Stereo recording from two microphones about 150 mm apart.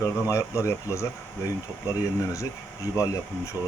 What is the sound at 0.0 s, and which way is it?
Speech, 20° left (ahead or behind).